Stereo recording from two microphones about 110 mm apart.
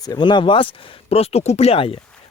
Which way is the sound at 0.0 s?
40° left (ahead or behind).